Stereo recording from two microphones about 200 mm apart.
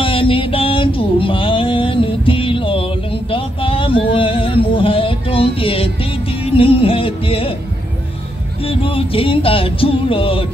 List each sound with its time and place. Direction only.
0.0 s music: 25° left (ahead or behind)
3.3 s a sound: 25° left (ahead or behind)
6.4 s music: 30° left (ahead or behind)
8.6 s music: 25° left (ahead or behind)